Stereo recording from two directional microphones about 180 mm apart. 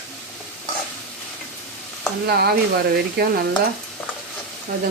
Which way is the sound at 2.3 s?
60° right (ahead or behind).